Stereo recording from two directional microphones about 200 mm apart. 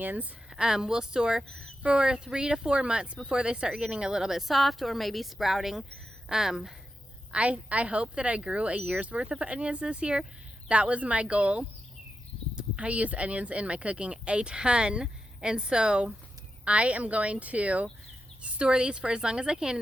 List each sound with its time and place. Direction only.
0.0 s speech: 10° right (ahead or behind)